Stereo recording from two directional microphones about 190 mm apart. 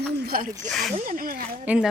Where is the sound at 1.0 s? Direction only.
45° right (ahead or behind).